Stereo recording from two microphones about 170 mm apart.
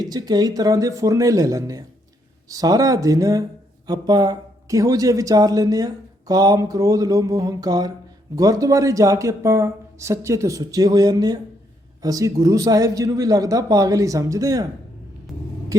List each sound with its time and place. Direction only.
0.0 s speech: 25° right (ahead or behind)